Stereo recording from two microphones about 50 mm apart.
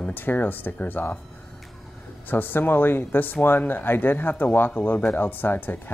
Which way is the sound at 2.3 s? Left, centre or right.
Left.